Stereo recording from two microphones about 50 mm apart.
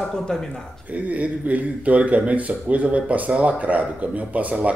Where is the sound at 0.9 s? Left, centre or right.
Right.